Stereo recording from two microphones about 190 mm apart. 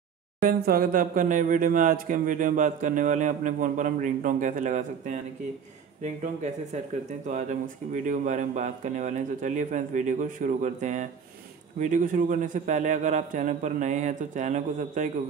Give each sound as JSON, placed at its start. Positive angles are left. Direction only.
{"t": 0.4, "sound": "speech", "side_deg": -50}
{"t": 6.2, "sound": "speech", "side_deg": -40}